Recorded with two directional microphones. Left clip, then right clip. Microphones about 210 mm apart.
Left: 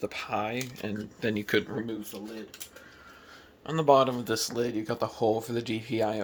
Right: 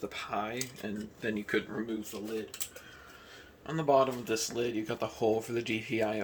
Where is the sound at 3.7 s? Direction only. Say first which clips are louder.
Left 5 dB; 50° left (ahead or behind).